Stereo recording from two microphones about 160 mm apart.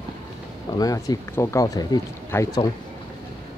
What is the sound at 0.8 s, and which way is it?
Speech, 20° left (ahead or behind).